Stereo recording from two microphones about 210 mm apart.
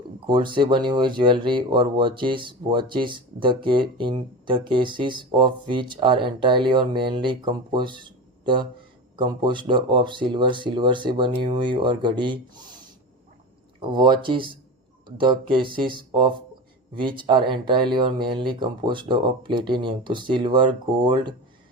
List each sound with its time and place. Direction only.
0.3 s speech: 20° right (ahead or behind)